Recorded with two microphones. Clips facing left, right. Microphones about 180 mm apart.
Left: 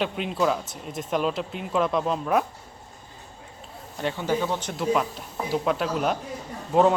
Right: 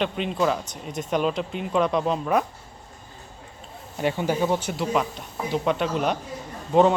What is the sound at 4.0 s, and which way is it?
Speech, 15° right (ahead or behind).